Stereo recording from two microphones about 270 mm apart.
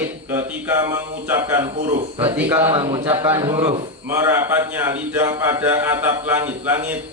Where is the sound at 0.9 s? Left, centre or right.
Centre.